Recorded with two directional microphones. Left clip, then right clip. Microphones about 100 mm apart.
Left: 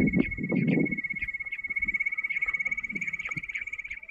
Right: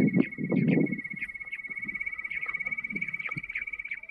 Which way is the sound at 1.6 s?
25° right (ahead or behind).